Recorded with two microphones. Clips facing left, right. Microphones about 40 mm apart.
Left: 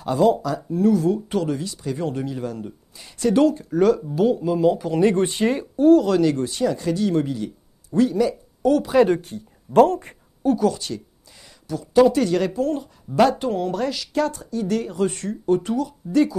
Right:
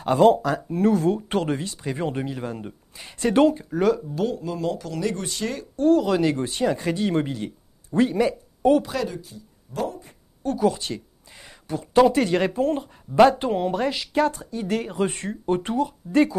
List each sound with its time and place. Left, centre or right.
0.0 s speech: right
3.7 s speech: centre
4.0 s speech: centre
4.9 s speech: left
5.8 s speech: centre
6.1 s speech: centre
6.4 s speech: right
9.0 s speech: left
10.6 s speech: right
11.4 s speech: right